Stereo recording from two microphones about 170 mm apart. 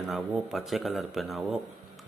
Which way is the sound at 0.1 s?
5° right (ahead or behind).